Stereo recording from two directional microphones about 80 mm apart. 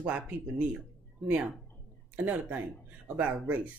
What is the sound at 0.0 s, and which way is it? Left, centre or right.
Speech, right.